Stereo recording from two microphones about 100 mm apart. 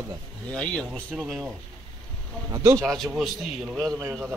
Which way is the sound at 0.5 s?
10° left (ahead or behind).